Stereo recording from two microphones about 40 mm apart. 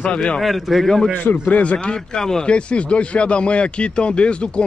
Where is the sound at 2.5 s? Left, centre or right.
Left.